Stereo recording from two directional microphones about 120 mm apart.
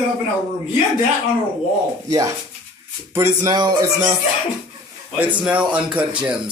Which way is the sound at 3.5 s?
35° right (ahead or behind).